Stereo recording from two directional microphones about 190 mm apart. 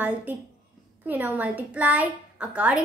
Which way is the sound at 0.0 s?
10° right (ahead or behind).